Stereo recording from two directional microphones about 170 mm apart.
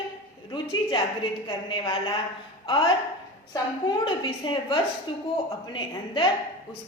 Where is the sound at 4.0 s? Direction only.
30° left (ahead or behind).